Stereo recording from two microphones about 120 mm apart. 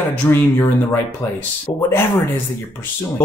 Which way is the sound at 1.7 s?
20° left (ahead or behind).